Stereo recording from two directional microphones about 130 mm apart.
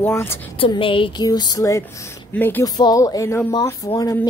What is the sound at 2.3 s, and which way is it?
Music, 15° left (ahead or behind).